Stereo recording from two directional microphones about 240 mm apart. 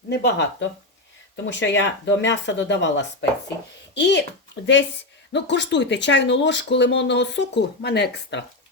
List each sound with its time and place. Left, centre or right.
0.1 s speech: left